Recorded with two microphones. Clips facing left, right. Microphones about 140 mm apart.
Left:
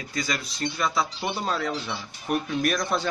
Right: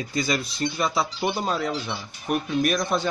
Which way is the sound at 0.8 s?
10° right (ahead or behind).